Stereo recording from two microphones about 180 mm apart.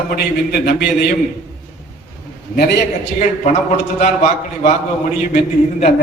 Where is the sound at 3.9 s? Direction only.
35° left (ahead or behind).